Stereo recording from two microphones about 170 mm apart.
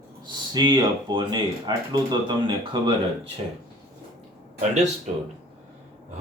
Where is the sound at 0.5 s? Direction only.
25° right (ahead or behind).